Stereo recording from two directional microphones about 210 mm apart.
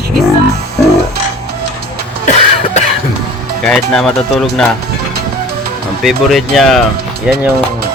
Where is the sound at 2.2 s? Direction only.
35° left (ahead or behind).